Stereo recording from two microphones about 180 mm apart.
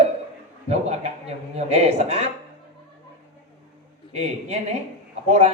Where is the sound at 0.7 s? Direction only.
35° right (ahead or behind).